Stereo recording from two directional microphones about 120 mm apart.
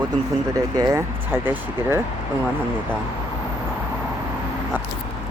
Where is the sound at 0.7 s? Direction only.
30° right (ahead or behind).